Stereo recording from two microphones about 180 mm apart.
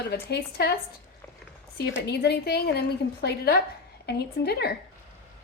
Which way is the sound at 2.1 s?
65° left (ahead or behind).